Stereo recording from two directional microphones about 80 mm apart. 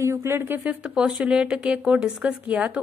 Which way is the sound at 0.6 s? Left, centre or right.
Centre.